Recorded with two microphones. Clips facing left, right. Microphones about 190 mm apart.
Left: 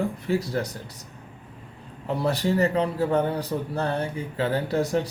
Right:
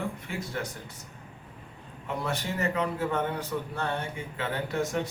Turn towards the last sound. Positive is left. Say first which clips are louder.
# left 5 dB
turn(degrees=35)  # may be behind; listen again after turning